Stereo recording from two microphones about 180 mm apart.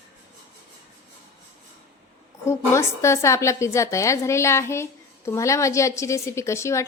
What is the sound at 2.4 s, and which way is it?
A woman's voice, 15° left (ahead or behind).